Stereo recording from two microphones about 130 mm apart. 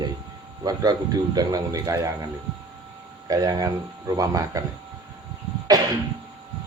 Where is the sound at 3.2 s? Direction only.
30° right (ahead or behind).